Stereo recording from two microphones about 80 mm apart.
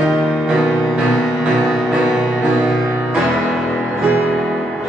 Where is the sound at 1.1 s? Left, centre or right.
Centre.